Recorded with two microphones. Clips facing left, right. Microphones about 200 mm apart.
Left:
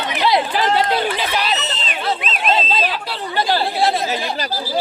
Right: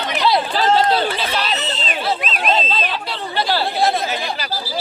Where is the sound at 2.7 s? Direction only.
10° left (ahead or behind).